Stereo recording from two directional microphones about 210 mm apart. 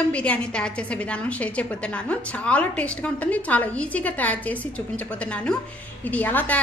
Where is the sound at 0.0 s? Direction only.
5° left (ahead or behind).